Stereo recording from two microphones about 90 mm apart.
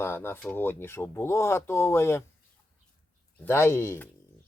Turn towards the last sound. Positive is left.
turn(degrees=25)  # may be behind; listen again after turning